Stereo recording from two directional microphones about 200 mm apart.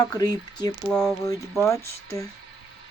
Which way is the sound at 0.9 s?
Centre (ahead or behind).